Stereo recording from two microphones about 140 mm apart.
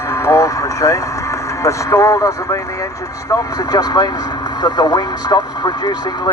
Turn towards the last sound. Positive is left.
turn(degrees=30)  # may be behind; listen again after turning